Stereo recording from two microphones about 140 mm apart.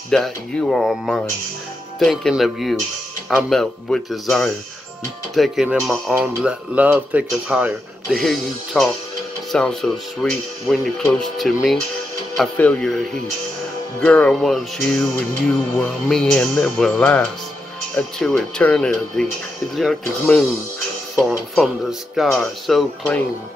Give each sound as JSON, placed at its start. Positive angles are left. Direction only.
{"t": 0.1, "sound": "speech", "side_deg": 5}
{"t": 6.2, "sound": "speech", "side_deg": -10}
{"t": 8.1, "sound": "speech", "side_deg": 0}
{"t": 21.2, "sound": "speech", "side_deg": 0}